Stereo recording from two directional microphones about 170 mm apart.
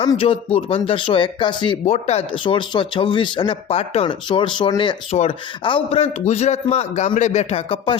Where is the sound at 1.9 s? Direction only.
40° left (ahead or behind).